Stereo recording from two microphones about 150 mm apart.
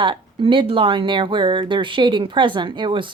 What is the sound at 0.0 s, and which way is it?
Speech, 35° right (ahead or behind).